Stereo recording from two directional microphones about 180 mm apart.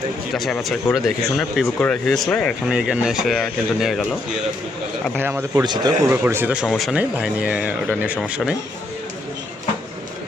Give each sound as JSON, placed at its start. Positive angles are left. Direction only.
{"t": 0.3, "sound": "speech", "side_deg": 0}
{"t": 5.1, "sound": "speech", "side_deg": -10}
{"t": 5.6, "sound": "speech", "side_deg": -25}
{"t": 6.1, "sound": "speech", "side_deg": -10}